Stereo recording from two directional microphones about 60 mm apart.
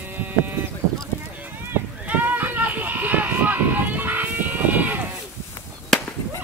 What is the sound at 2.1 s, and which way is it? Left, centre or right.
Run, right.